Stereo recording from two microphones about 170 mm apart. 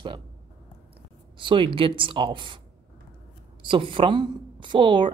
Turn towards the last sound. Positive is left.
turn(degrees=-30)  # may be behind; listen again after turning